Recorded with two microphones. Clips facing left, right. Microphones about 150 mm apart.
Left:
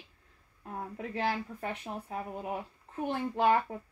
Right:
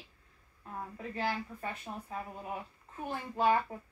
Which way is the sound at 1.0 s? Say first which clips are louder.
Left 3 dB; 70° left (ahead or behind).